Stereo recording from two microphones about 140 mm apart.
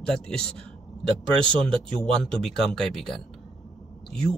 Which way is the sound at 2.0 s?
5° left (ahead or behind).